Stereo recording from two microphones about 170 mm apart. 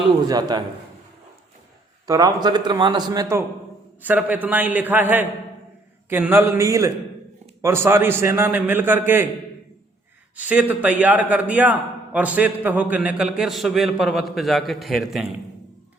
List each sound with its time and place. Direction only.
0.3 s a man's voice: 25° right (ahead or behind)
2.0 s a man's voice: 25° right (ahead or behind)
10.3 s a man's voice: 10° right (ahead or behind)